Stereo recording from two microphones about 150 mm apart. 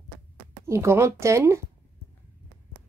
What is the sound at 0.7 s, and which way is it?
Speech, 15° right (ahead or behind).